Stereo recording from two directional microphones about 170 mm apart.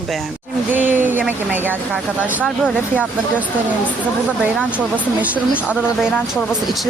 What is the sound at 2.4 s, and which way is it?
Speech, centre (ahead or behind).